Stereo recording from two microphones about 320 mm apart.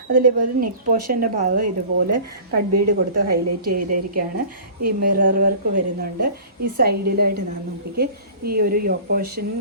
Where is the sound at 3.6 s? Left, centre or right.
Right.